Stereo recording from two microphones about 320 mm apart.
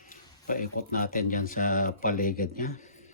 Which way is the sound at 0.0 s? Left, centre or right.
Left.